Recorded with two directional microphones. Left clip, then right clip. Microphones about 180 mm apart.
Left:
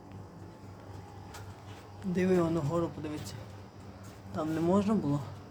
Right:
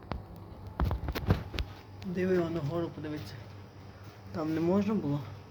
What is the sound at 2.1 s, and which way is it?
Speech, 30° left (ahead or behind).